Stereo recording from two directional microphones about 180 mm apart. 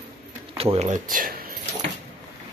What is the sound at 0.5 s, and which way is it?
Speech, 30° right (ahead or behind).